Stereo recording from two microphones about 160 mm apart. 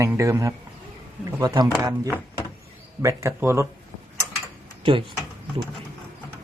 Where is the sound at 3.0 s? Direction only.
20° right (ahead or behind).